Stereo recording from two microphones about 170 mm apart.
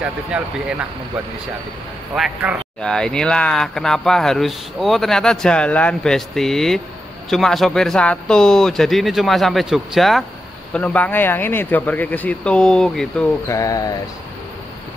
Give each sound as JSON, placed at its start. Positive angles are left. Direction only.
{"t": 0.0, "sound": "speech", "side_deg": -5}
{"t": 2.1, "sound": "speech", "side_deg": -5}
{"t": 13.5, "sound": "speech", "side_deg": 20}